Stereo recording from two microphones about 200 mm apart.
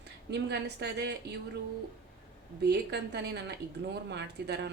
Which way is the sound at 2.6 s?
55° right (ahead or behind).